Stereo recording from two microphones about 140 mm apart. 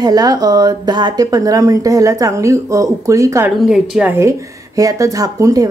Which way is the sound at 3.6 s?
Centre (ahead or behind).